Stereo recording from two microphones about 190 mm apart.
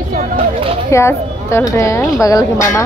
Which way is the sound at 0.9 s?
15° left (ahead or behind).